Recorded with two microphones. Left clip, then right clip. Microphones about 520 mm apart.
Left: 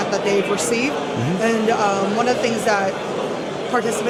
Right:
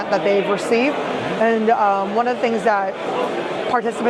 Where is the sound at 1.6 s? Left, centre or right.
Right.